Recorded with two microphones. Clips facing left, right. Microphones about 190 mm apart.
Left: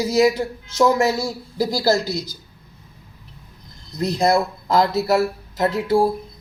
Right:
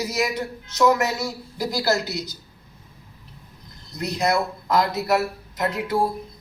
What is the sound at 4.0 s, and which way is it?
A man's voice, 30° left (ahead or behind).